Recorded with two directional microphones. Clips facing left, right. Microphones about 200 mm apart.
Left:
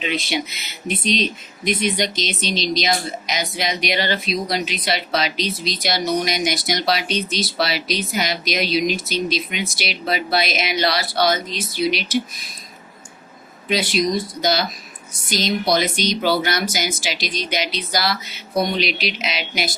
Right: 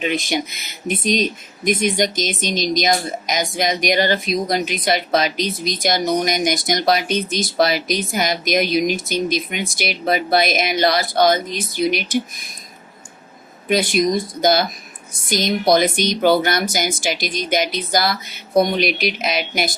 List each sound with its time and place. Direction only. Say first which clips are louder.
0.0 s speech: right 3 dB; 50° right (ahead or behind)
13.7 s speech: right 3 dB; 50° right (ahead or behind)